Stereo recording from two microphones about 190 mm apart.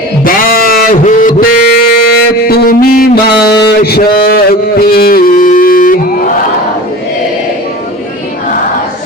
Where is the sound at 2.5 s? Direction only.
50° left (ahead or behind).